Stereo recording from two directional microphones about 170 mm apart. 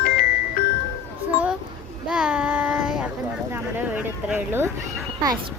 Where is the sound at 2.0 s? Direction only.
5° right (ahead or behind).